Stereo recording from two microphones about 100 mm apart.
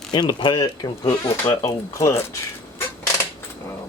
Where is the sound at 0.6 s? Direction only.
35° left (ahead or behind).